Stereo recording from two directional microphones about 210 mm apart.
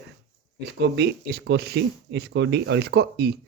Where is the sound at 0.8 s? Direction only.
55° right (ahead or behind).